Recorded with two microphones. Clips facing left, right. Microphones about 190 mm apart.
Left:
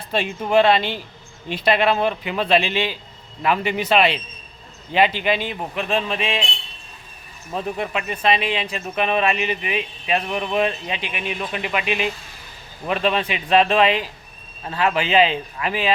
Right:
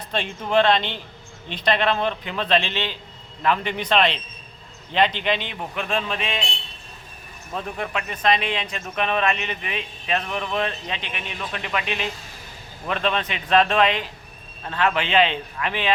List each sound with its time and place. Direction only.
0.1 s speech: 10° left (ahead or behind)
7.8 s speech: 5° left (ahead or behind)